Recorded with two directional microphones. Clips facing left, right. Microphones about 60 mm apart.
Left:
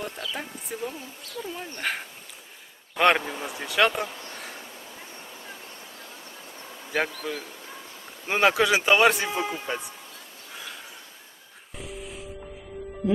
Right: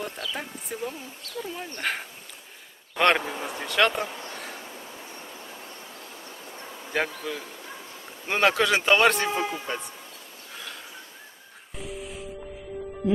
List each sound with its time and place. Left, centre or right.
0.0 s speech: centre
4.1 s speech: right
7.3 s speech: centre
10.5 s a sound: centre
11.8 s music: centre